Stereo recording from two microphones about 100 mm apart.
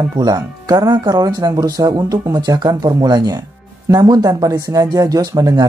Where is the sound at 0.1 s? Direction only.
35° right (ahead or behind).